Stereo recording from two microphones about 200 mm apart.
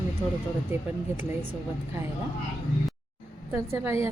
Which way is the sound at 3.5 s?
15° right (ahead or behind).